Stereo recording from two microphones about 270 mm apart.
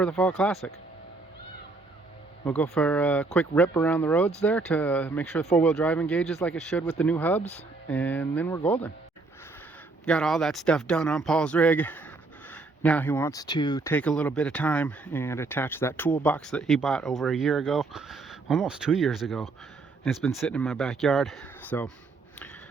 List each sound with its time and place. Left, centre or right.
0.0 s speech: centre
2.4 s speech: centre
10.1 s speech: centre